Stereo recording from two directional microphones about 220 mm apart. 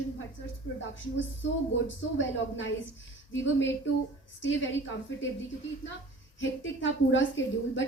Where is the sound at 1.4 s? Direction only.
55° left (ahead or behind).